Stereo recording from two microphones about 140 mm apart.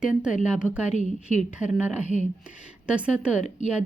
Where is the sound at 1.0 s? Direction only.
60° left (ahead or behind).